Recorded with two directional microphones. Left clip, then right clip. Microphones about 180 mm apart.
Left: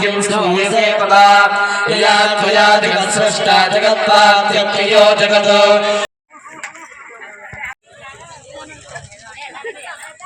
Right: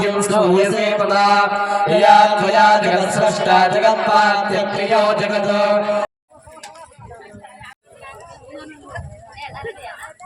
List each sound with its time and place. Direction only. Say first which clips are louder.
0.0 s speech: left 1 dB; 75° right (ahead or behind)
4.1 s chant: left 5 dB; 65° right (ahead or behind)